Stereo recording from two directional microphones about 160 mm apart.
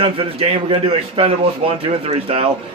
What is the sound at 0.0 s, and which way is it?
A man's voice, 35° right (ahead or behind).